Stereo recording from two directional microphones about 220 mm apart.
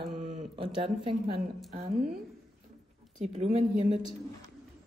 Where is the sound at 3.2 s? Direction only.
30° right (ahead or behind).